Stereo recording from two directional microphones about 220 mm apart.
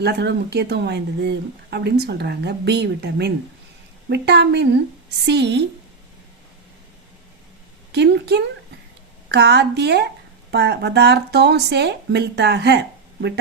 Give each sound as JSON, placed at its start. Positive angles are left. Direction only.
{"t": 0.0, "sound": "speech", "side_deg": -50}
{"t": 7.9, "sound": "speech", "side_deg": -50}